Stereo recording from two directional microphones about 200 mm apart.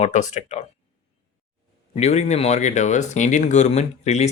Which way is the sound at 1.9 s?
35° left (ahead or behind).